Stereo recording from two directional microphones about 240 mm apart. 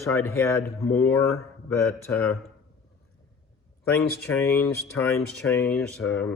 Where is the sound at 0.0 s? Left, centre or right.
Centre.